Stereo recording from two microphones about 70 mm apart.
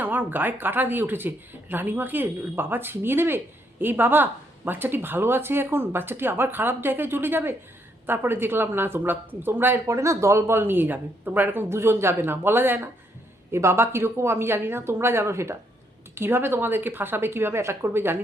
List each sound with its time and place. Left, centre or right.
0.0 s speech: right
9.8 s speech: right